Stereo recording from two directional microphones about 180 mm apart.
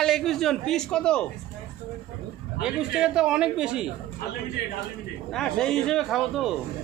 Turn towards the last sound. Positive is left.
turn(degrees=0)  # may be behind; listen again after turning